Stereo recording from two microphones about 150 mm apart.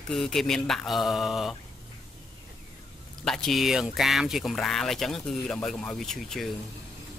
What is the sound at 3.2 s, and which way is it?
Speech, 5° left (ahead or behind).